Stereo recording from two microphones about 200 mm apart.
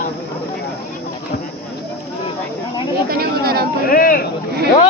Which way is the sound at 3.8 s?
45° left (ahead or behind).